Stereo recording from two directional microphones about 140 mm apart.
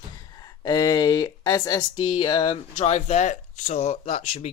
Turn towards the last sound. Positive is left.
turn(degrees=45)  # may be behind; listen again after turning